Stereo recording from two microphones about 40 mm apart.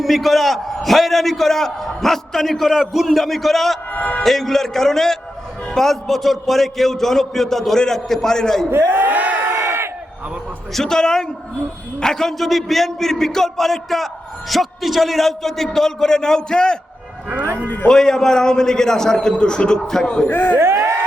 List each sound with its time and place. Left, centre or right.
0.0 s a man's voice: centre
2.6 s a man's voice: centre
3.9 s speech: left
4.2 s a man's voice: centre
8.9 s a sound: right
9.6 s crowd: right
10.8 s a man's voice: centre
12.4 s a man's voice: centre
17.8 s a man's voice: centre
19.8 s a man's voice: centre
20.2 s speech: left